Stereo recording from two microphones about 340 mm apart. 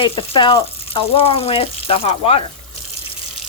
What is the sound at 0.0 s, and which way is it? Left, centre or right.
Speech, centre.